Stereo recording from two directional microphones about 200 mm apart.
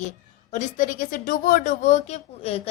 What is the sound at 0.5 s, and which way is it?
A woman's voice, 40° left (ahead or behind).